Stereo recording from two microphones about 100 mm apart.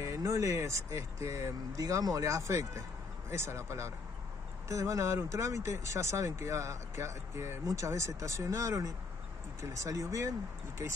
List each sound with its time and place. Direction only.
0.0 s speech: 30° right (ahead or behind)